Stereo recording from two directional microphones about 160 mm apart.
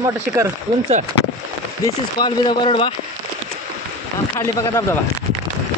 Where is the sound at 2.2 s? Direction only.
30° left (ahead or behind).